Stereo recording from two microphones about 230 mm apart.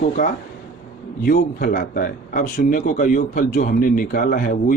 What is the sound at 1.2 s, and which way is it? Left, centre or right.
Speech, left.